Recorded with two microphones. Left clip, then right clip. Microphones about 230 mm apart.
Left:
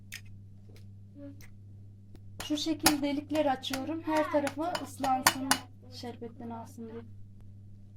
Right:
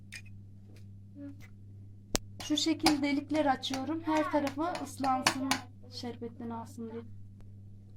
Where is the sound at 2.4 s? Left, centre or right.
Centre.